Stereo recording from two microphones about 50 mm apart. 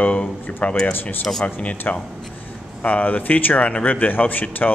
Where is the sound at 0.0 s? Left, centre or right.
Left.